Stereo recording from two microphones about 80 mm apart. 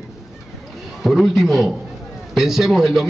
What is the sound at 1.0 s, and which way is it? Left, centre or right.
A man's voice, centre.